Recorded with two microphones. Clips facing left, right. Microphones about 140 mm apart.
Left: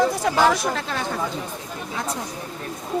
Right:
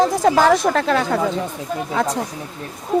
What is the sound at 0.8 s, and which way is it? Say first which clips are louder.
Speech: right 9 dB; 85° right.